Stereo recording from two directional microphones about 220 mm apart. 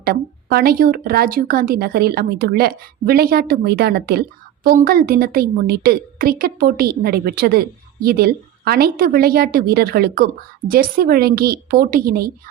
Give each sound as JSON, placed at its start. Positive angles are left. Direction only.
{"t": 0.0, "sound": "speech", "side_deg": -45}